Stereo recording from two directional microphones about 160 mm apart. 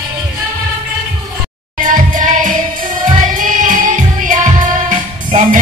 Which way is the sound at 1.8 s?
55° right (ahead or behind).